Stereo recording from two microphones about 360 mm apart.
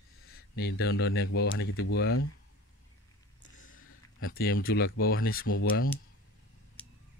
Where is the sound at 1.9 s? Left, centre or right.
Left.